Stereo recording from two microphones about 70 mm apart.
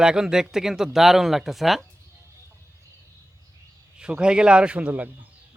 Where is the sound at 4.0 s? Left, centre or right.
Centre.